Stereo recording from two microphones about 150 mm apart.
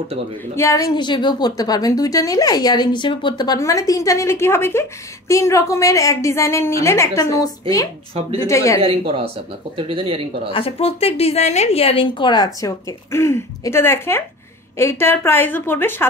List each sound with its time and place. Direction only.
0.6 s a woman's voice: 20° left (ahead or behind)
8.1 s speech: 40° right (ahead or behind)
8.5 s a woman's voice: 20° left (ahead or behind)
9.8 s speech: 35° right (ahead or behind)
10.5 s a woman's voice: 40° left (ahead or behind); by 16.1 s 15° left (ahead or behind)